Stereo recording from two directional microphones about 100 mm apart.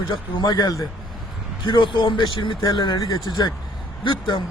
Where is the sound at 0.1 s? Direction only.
45° left (ahead or behind).